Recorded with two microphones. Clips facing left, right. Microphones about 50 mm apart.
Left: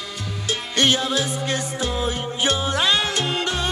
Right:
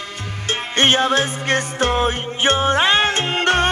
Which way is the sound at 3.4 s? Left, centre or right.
Right.